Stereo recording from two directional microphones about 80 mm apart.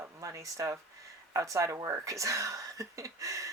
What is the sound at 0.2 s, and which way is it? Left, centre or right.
Speech, right.